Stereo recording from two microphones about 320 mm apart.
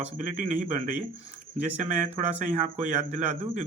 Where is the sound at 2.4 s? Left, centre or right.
Right.